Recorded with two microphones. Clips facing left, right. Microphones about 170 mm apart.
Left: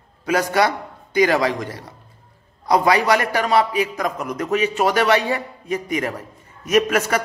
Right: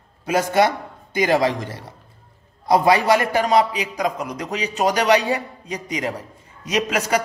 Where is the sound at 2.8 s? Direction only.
25° right (ahead or behind).